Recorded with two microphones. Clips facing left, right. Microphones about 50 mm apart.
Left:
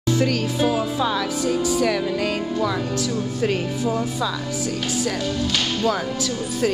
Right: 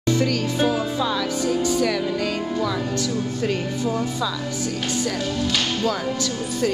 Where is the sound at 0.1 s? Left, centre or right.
Centre.